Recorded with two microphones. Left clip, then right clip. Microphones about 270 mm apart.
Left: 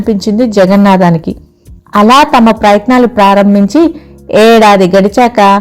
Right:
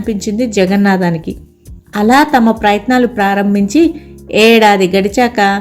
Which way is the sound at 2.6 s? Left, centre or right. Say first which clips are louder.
Left 5 dB; centre.